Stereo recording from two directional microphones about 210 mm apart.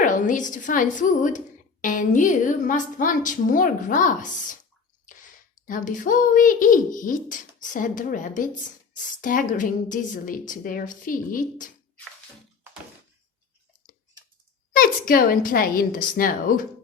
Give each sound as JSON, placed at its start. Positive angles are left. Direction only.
{"t": 0.0, "sound": "a child's voice", "side_deg": 40}
{"t": 5.6, "sound": "a child's voice", "side_deg": 40}
{"t": 14.7, "sound": "a woman's voice", "side_deg": 40}